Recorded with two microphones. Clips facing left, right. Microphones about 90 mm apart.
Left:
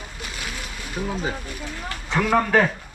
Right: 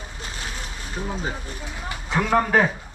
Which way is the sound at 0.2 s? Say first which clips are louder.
Left 1 dB; 30° right (ahead or behind).